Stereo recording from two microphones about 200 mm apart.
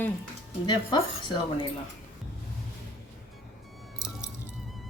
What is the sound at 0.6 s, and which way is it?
Speech, 20° left (ahead or behind).